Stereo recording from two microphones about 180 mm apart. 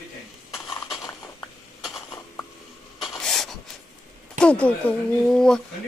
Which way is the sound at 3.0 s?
Centre (ahead or behind).